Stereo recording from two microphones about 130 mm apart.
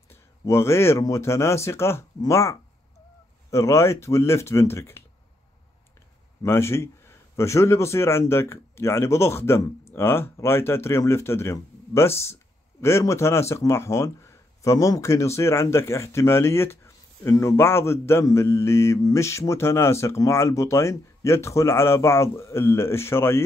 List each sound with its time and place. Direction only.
0.1 s speech: 20° left (ahead or behind)
6.4 s speech: 20° left (ahead or behind)